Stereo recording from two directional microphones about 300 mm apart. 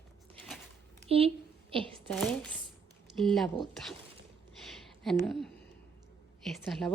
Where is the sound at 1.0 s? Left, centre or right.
Centre.